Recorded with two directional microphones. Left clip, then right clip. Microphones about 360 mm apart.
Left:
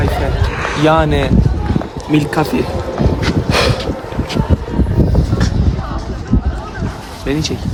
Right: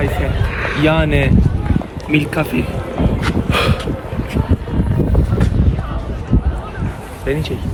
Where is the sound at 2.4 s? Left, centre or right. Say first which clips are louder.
Left 4 dB; centre.